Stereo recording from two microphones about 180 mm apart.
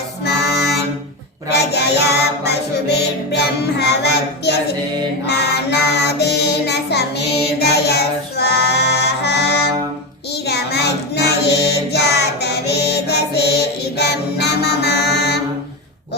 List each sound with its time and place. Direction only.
0.3 s music: 65° left (ahead or behind)
5.2 s child singing: 65° left (ahead or behind)
7.6 s music: 65° left (ahead or behind)
10.4 s child singing: 65° left (ahead or behind)